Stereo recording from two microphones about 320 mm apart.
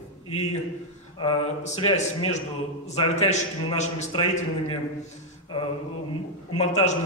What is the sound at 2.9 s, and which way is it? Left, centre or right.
A man's voice, centre.